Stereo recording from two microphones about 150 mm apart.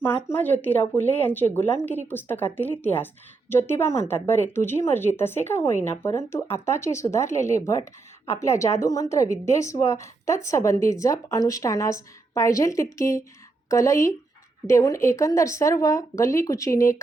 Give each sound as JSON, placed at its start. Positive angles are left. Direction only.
{"t": 0.3, "sound": "a woman's voice", "side_deg": 10}